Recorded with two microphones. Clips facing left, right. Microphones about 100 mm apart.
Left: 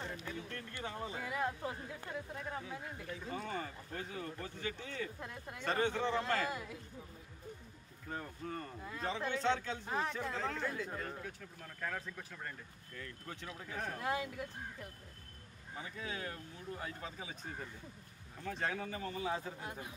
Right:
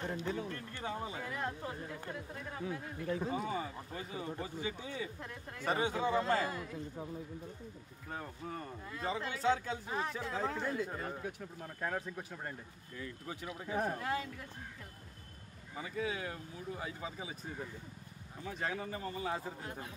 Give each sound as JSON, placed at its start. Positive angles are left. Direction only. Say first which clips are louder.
{"t": 0.2, "sound": "a sound", "louder": "right 7 dB", "side_deg": -30}
{"t": 0.8, "sound": "speech", "louder": "right 3 dB", "side_deg": -10}
{"t": 1.2, "sound": "a sound", "louder": "left 2 dB", "side_deg": 10}
{"t": 2.6, "sound": "speech", "louder": "right 6 dB", "side_deg": -45}
{"t": 3.3, "sound": "speech", "louder": "right 4 dB", "side_deg": -10}
{"t": 8.1, "sound": "speech", "louder": "even", "side_deg": -5}
{"t": 12.9, "sound": "speech", "louder": "right 4 dB", "side_deg": -10}
{"t": 13.9, "sound": "speech", "louder": "even", "side_deg": 15}
{"t": 15.8, "sound": "speech", "louder": "right 5 dB", "side_deg": -5}
{"t": 18.4, "sound": "speech", "louder": "even", "side_deg": -5}